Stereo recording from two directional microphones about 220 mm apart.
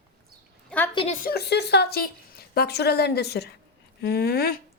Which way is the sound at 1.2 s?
45° left (ahead or behind).